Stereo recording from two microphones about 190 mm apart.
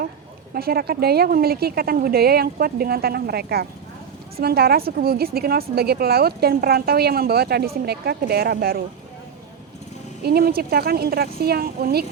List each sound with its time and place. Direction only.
0.5 s a woman's voice: 55° right (ahead or behind)
10.2 s speech: 55° right (ahead or behind)